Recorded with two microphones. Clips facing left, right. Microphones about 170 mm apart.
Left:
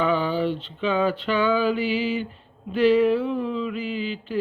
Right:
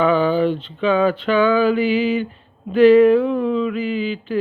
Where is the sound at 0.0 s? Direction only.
55° right (ahead or behind).